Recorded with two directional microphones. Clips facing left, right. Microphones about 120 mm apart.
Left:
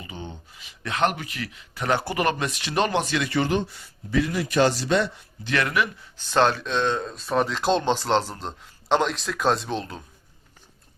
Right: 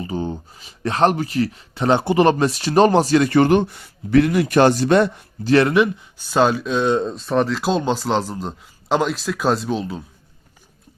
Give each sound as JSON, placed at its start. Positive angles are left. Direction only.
{"t": 0.0, "sound": "speech", "side_deg": -35}
{"t": 5.5, "sound": "speech", "side_deg": -30}
{"t": 6.1, "sound": "speech", "side_deg": -10}
{"t": 6.9, "sound": "speech", "side_deg": -25}
{"t": 7.3, "sound": "a man's voice", "side_deg": 0}